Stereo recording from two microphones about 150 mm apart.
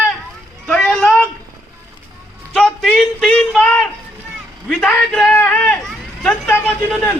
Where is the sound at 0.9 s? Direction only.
Centre (ahead or behind).